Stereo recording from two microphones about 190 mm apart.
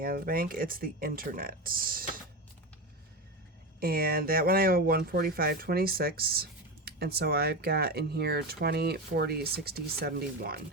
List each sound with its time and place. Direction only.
0.0 s speech: 50° right (ahead or behind)
3.8 s speech: 50° right (ahead or behind)